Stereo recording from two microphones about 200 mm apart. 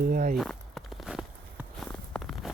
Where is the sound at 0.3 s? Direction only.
Centre (ahead or behind).